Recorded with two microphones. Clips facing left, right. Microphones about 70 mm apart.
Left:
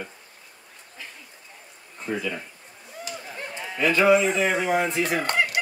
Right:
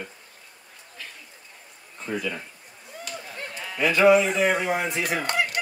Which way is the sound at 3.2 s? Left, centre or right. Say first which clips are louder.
Left 1 dB; centre.